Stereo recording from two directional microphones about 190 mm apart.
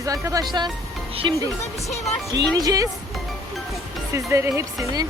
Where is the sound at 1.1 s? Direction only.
30° right (ahead or behind).